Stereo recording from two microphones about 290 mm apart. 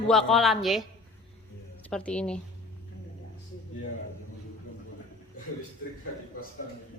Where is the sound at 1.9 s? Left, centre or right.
Centre.